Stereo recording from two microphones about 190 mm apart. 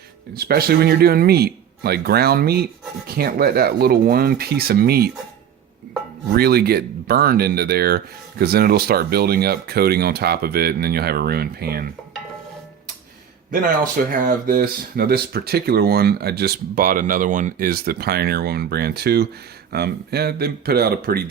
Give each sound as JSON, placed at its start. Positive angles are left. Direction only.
{"t": 0.3, "sound": "speech", "side_deg": -55}
{"t": 6.3, "sound": "speech", "side_deg": -55}
{"t": 13.5, "sound": "speech", "side_deg": -50}